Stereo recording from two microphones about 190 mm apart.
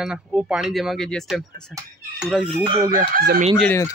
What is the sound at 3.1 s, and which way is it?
Chicken, 50° right (ahead or behind).